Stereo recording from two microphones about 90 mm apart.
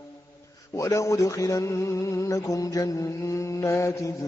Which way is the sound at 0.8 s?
35° left (ahead or behind).